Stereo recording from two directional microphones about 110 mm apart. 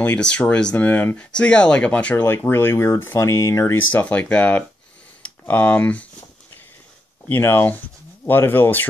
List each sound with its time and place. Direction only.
0.0 s speech: 10° left (ahead or behind); by 3.7 s 30° left (ahead or behind)
3.9 s speech: 15° left (ahead or behind)
7.2 s speech: 20° left (ahead or behind)